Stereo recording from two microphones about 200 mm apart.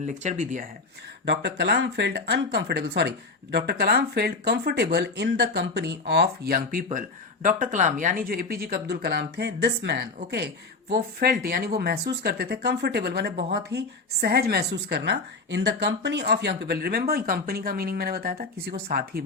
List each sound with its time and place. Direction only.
0.0 s speech: 35° right (ahead or behind)
1.2 s a woman's voice: 60° right (ahead or behind)